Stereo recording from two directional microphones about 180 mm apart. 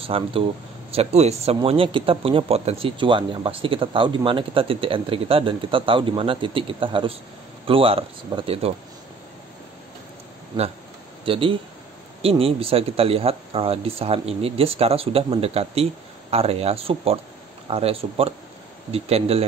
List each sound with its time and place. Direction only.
0.0 s speech: 30° right (ahead or behind)
11.2 s speech: 30° right (ahead or behind)